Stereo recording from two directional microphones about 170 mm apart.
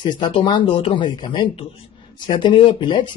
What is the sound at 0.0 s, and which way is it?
Speech, 30° left (ahead or behind).